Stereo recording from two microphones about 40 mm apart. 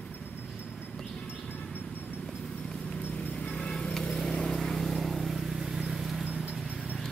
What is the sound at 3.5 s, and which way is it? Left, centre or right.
Vehicle, left.